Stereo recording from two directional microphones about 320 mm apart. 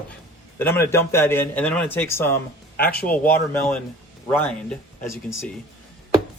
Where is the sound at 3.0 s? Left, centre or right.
Centre.